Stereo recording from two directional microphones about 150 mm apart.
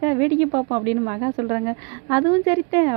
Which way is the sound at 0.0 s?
20° right (ahead or behind).